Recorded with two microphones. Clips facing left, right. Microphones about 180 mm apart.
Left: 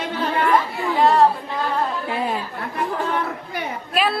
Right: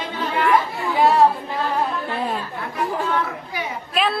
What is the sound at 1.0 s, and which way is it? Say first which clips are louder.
Speech: even; 5° right (ahead or behind).